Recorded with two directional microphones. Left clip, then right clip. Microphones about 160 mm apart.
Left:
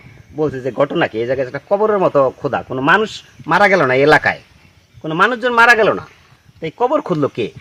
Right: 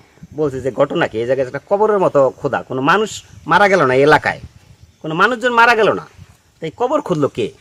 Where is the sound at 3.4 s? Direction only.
20° right (ahead or behind).